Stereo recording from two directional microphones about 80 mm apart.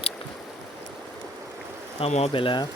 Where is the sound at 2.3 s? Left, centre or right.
Left.